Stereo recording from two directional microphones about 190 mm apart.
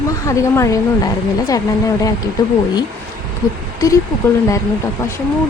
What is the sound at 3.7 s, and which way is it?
Speech, 15° left (ahead or behind).